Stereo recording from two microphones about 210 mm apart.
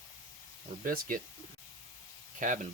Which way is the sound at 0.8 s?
45° right (ahead or behind).